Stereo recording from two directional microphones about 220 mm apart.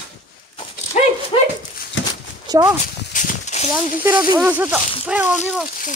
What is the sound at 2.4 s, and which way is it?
Horse, 15° right (ahead or behind).